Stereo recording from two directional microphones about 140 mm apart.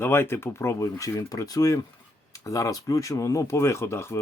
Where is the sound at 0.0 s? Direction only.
15° left (ahead or behind).